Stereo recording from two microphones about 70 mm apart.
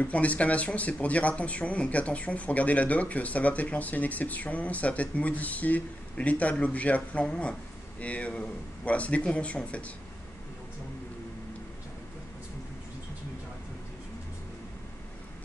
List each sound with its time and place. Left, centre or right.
0.0 s speech: left